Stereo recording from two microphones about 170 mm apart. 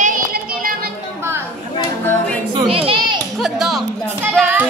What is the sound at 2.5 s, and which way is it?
Children playing, 35° right (ahead or behind).